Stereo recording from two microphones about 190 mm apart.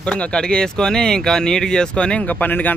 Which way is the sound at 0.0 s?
5° left (ahead or behind).